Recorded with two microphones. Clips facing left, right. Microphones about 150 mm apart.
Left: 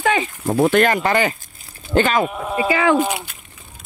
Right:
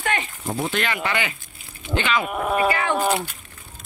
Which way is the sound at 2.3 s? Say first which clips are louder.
Left 1 dB; 65° right (ahead or behind).